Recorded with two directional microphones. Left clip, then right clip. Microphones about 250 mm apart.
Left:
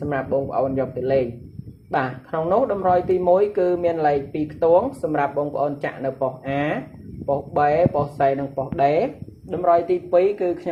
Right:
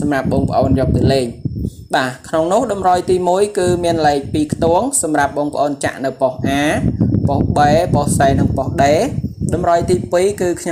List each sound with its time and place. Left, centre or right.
0.1 s speech: right